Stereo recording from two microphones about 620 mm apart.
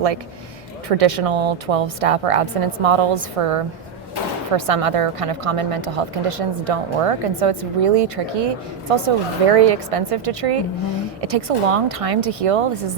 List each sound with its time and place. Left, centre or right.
0.9 s speech: right